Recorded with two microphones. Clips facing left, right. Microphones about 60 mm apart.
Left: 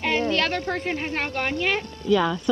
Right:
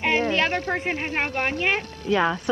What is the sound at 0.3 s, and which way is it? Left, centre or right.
A woman's voice, right.